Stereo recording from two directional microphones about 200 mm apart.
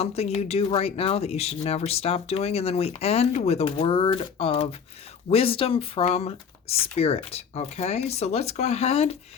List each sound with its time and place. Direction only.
0.0 s speech: 30° left (ahead or behind)